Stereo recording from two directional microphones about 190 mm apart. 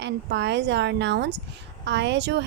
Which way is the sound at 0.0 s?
65° right (ahead or behind).